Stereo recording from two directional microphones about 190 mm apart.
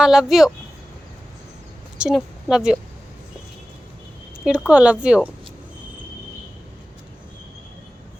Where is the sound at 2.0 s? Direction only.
5° right (ahead or behind).